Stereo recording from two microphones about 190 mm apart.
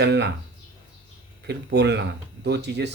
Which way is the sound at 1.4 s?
60° right (ahead or behind).